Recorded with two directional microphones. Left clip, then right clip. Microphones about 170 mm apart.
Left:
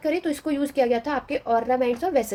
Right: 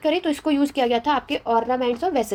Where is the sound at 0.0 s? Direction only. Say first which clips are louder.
Right 4 dB; 25° right (ahead or behind).